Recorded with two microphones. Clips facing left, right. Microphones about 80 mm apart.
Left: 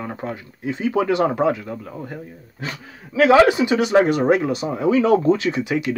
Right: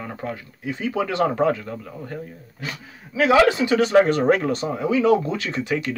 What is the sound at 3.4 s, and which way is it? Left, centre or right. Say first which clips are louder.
Speech: left 1 dB; centre.